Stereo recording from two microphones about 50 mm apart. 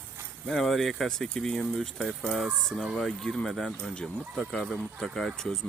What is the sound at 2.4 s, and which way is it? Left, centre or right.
Speech, centre.